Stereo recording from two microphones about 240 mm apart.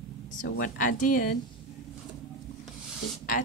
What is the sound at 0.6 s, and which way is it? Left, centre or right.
Speech, left.